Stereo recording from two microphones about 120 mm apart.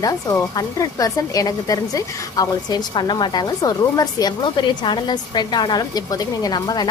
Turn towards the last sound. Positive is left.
turn(degrees=35)  # may be behind; listen again after turning